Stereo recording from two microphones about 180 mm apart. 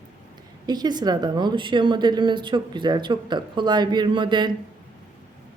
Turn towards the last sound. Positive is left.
turn(degrees=-25)  # may be behind; listen again after turning